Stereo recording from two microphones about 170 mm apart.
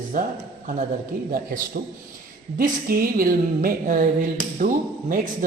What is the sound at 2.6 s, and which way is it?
A woman's voice, 60° right (ahead or behind).